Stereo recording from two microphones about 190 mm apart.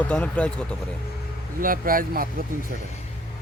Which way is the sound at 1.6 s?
50° right (ahead or behind).